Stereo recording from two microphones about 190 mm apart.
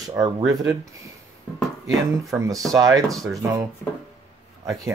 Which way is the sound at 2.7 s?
20° right (ahead or behind).